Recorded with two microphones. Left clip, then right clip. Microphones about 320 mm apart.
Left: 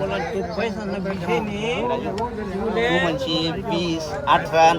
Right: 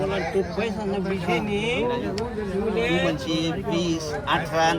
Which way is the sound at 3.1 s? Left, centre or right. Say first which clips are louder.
Left 3 dB; centre.